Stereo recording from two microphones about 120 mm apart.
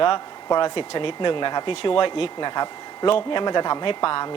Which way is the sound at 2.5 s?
35° left (ahead or behind).